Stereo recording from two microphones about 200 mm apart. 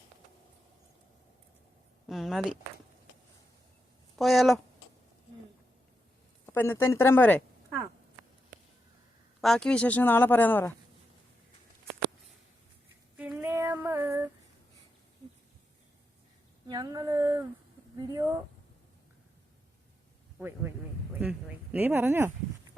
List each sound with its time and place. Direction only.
2.0 s speech: centre (ahead or behind)
4.2 s speech: centre (ahead or behind)
6.4 s speech: 10° left (ahead or behind)
9.4 s speech: 5° left (ahead or behind)
13.1 s female singing: 10° right (ahead or behind)
16.6 s speech: 20° right (ahead or behind)
20.4 s speech: 10° right (ahead or behind)